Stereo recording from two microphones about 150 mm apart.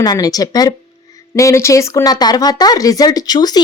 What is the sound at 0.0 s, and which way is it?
Speech, 25° left (ahead or behind).